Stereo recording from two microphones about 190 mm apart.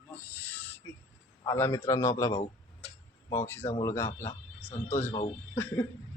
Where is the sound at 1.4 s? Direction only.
15° left (ahead or behind).